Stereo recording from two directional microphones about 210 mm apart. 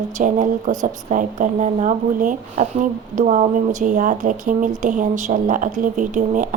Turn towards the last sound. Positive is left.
turn(degrees=-35)  # may be behind; listen again after turning